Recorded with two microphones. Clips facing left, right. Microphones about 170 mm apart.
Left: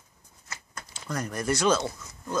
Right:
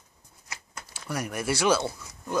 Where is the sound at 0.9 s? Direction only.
10° right (ahead or behind).